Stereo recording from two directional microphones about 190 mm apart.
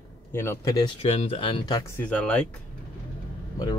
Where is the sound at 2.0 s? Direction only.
5° left (ahead or behind).